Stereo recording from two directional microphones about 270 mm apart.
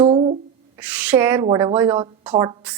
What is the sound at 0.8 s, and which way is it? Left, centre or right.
A woman's voice, centre.